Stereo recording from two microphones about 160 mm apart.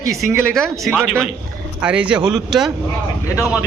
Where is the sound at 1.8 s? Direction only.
5° right (ahead or behind).